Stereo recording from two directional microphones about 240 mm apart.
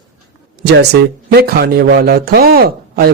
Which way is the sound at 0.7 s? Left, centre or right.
Right.